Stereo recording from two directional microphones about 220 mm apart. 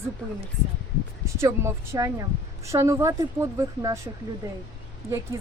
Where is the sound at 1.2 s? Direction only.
15° right (ahead or behind).